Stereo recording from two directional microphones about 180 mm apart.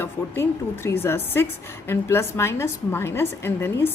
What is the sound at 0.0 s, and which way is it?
A woman's voice, 15° left (ahead or behind).